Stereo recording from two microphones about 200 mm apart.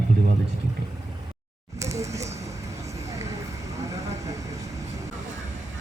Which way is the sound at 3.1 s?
15° right (ahead or behind).